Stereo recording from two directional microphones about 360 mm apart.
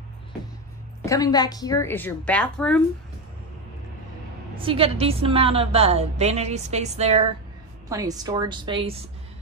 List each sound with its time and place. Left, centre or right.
1.0 s a woman's voice: centre
4.6 s a woman's voice: centre